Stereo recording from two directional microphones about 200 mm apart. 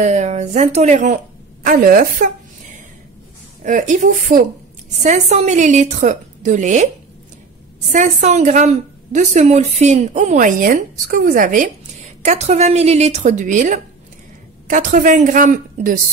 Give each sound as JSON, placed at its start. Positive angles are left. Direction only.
{"t": 0.0, "sound": "a woman's voice", "side_deg": -35}
{"t": 3.6, "sound": "a woman's voice", "side_deg": -40}
{"t": 7.9, "sound": "a woman's voice", "side_deg": -35}